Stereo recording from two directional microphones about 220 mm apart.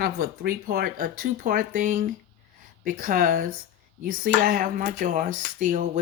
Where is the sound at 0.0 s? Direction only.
45° right (ahead or behind).